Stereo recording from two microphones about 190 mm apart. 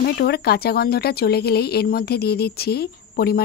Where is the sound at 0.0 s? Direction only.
55° left (ahead or behind).